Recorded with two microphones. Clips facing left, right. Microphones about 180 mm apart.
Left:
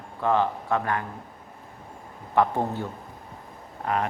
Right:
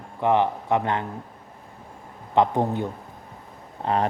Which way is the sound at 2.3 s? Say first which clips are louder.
Right 3 dB; 20° right (ahead or behind).